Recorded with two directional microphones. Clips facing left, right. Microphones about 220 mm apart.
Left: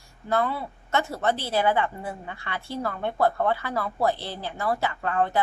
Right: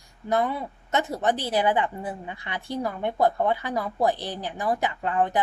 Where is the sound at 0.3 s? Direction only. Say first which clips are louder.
Right 1 dB; 15° right (ahead or behind).